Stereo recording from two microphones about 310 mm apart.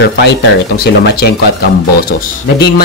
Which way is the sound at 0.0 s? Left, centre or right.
Left.